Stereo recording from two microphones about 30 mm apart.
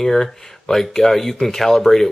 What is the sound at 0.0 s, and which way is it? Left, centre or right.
Speech, centre.